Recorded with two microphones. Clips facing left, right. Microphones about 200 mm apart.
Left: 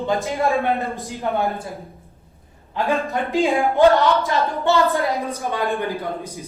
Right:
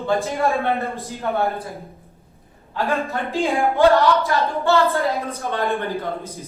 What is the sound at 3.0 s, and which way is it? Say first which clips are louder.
A woman's voice: left 3 dB; 15° left (ahead or behind).